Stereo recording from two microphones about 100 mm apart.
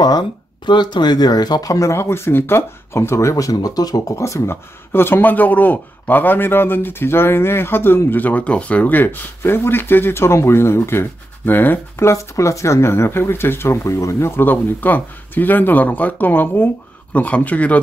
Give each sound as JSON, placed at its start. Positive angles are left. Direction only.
{"t": 0.7, "sound": "speech", "side_deg": 50}
{"t": 4.1, "sound": "speech", "side_deg": 30}